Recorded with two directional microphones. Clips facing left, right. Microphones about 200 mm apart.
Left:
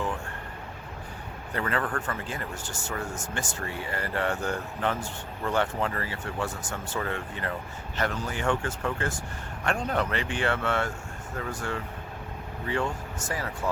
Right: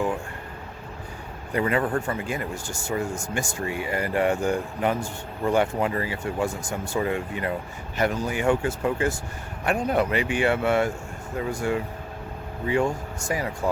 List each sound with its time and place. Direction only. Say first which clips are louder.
1.5 s a man's voice: right 6 dB; 15° right (ahead or behind)
2.0 s speech: right 6 dB; 10° right (ahead or behind)